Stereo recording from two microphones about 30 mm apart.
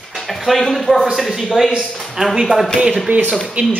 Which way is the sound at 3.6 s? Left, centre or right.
Right.